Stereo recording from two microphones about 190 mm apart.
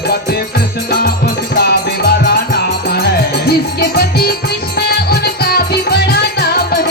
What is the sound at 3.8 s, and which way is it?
Music, 55° left (ahead or behind).